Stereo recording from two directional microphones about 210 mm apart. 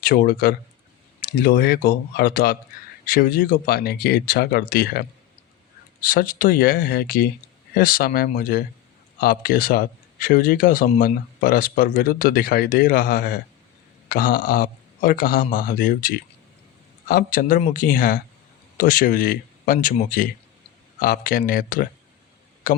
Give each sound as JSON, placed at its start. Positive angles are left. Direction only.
{"t": 0.0, "sound": "speech", "side_deg": 45}